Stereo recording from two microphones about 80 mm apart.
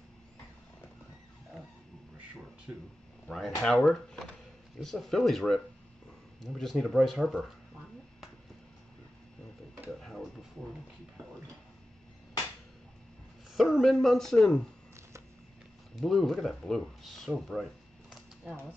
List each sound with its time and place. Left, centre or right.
2.7 s speech: right
3.3 s speech: centre
9.8 s tick-tock: centre
13.6 s speech: centre
16.0 s speech: centre